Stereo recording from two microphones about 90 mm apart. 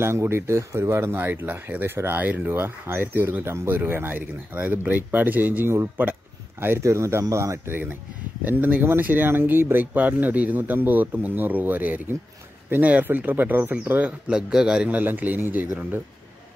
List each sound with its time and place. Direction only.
0.0 s a man's voice: 30° right (ahead or behind)